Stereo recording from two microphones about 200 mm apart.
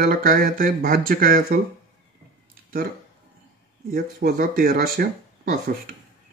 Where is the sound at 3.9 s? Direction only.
50° right (ahead or behind).